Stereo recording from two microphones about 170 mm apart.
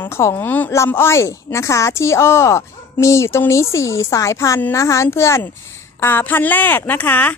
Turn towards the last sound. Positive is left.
turn(degrees=10)  # may be behind; listen again after turning